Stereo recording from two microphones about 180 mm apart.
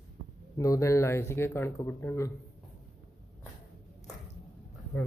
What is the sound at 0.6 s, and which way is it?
Speech, 20° left (ahead or behind).